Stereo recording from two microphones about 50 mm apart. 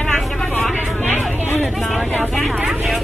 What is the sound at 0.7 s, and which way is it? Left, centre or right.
Speech, left.